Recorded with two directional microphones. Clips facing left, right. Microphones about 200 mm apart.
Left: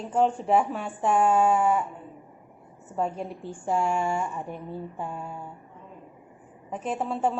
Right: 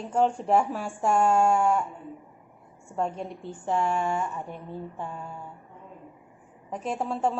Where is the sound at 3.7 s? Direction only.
10° left (ahead or behind).